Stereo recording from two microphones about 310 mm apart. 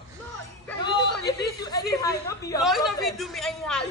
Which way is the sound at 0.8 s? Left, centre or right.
Centre.